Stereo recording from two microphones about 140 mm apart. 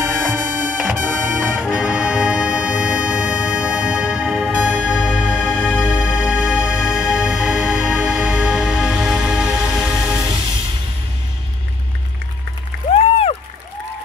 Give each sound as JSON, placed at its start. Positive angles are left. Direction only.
{"t": 0.3, "sound": "music", "side_deg": -10}
{"t": 5.9, "sound": "music", "side_deg": -5}
{"t": 12.9, "sound": "music", "side_deg": 45}